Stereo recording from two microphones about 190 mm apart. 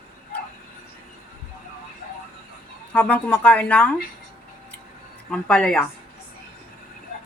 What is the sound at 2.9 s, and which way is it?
Speech, 5° left (ahead or behind).